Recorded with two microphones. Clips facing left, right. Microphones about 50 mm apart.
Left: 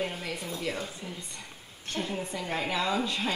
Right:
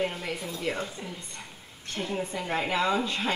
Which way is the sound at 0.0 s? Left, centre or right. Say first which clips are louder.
Right 3 dB; centre.